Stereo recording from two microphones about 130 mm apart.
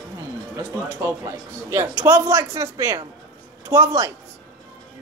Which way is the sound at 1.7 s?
20° right (ahead or behind).